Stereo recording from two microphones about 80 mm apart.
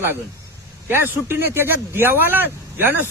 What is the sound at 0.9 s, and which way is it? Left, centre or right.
A man's voice, right.